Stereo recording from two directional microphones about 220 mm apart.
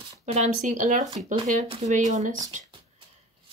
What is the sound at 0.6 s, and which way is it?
Speech, 35° right (ahead or behind).